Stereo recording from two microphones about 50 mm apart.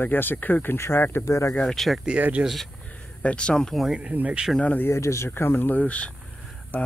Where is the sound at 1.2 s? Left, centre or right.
Left.